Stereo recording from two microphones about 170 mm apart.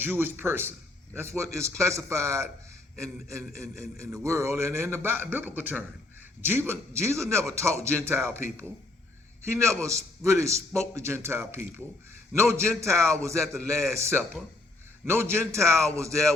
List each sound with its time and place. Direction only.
0.0 s a man's voice: 15° right (ahead or behind)